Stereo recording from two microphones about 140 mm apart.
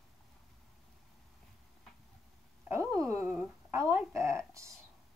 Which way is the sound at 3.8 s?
20° right (ahead or behind).